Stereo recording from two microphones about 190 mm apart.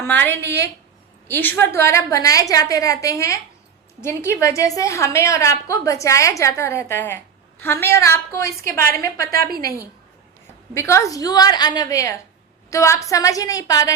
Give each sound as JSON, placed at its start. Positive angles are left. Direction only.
{"t": 0.0, "sound": "a woman's voice", "side_deg": 10}
{"t": 10.8, "sound": "a woman's voice", "side_deg": 15}